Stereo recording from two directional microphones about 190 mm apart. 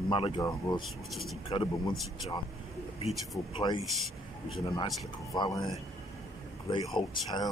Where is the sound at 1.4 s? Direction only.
25° left (ahead or behind).